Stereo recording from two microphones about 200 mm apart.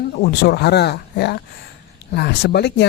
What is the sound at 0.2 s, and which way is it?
Speech, 55° left (ahead or behind).